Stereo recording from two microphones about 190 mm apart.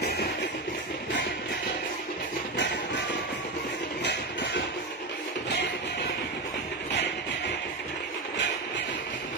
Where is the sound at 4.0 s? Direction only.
65° left (ahead or behind).